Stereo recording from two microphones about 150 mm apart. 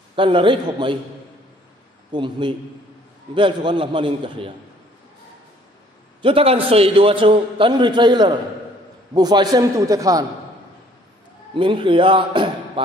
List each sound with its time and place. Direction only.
0.1 s a man's voice: 35° right (ahead or behind)
2.1 s a man's voice: 30° right (ahead or behind)
6.2 s a man's voice: 40° right (ahead or behind); by 10.2 s 20° right (ahead or behind)
11.5 s a man's voice: 35° right (ahead or behind)